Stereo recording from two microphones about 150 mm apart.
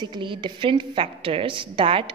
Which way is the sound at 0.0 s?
30° right (ahead or behind).